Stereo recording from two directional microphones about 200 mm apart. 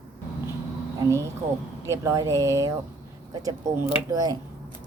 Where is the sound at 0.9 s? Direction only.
15° right (ahead or behind).